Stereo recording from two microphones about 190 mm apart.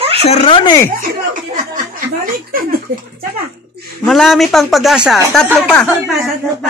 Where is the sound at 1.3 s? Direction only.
45° right (ahead or behind).